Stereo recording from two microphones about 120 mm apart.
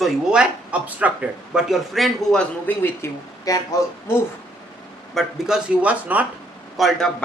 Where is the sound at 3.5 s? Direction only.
30° left (ahead or behind).